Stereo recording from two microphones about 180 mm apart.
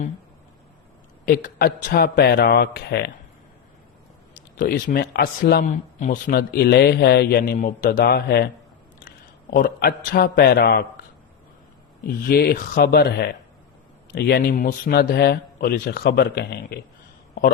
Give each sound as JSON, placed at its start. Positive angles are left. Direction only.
{"t": 1.2, "sound": "speech", "side_deg": 50}
{"t": 4.4, "sound": "a man's voice", "side_deg": 50}
{"t": 6.2, "sound": "speech", "side_deg": 60}
{"t": 9.0, "sound": "a man's voice", "side_deg": 50}
{"t": 12.0, "sound": "speech", "side_deg": 60}